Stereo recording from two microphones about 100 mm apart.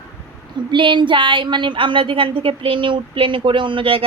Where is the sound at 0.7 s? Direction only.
55° right (ahead or behind).